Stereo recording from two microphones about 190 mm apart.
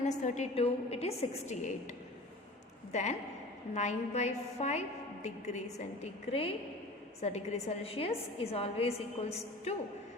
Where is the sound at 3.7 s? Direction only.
35° left (ahead or behind).